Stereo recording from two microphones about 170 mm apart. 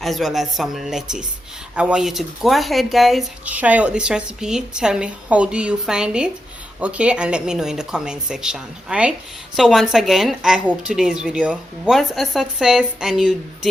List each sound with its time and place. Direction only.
0.0 s speech: centre (ahead or behind)